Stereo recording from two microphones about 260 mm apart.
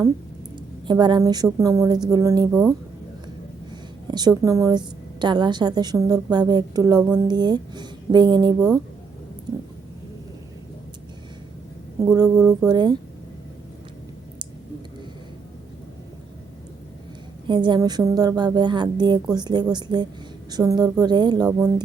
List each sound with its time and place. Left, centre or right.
0.9 s a woman's voice: centre
4.1 s a woman's voice: centre
12.0 s a woman's voice: centre
17.5 s a woman's voice: centre